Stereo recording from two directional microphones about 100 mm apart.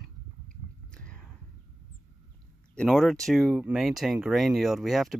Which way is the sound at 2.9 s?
5° left (ahead or behind).